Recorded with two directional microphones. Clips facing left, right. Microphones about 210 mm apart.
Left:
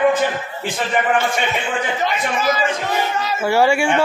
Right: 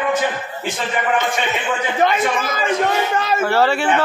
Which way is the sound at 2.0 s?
55° right (ahead or behind).